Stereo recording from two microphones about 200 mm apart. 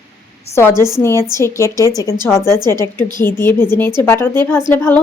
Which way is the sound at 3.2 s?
10° left (ahead or behind).